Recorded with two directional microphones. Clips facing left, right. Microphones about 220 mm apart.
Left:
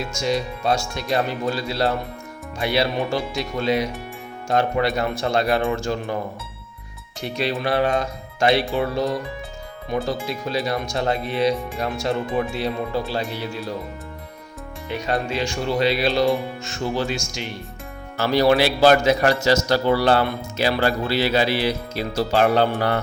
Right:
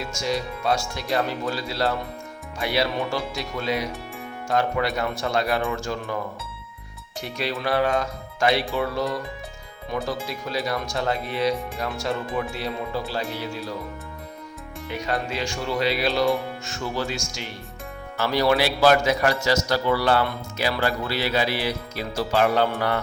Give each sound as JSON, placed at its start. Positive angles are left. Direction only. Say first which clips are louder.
{"t": 0.1, "sound": "speech", "louder": "left 3 dB", "side_deg": 20}
{"t": 7.3, "sound": "speech", "louder": "left 3 dB", "side_deg": 25}
{"t": 15.0, "sound": "speech", "louder": "left 4 dB", "side_deg": 25}
{"t": 18.2, "sound": "speech", "louder": "left 4 dB", "side_deg": 30}